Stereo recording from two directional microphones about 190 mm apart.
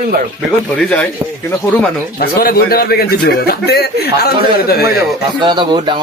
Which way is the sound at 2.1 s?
50° left (ahead or behind).